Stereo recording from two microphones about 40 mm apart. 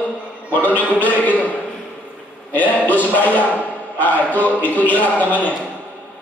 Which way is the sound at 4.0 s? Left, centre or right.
Left.